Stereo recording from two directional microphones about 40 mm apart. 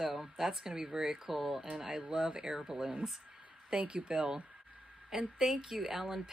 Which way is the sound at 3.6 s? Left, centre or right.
Right.